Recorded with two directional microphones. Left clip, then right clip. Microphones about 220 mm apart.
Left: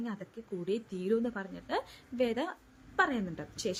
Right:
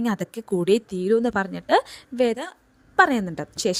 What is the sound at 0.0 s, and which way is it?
A woman's voice, 45° right (ahead or behind).